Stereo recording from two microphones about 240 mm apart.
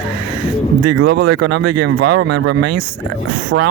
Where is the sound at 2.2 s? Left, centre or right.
Right.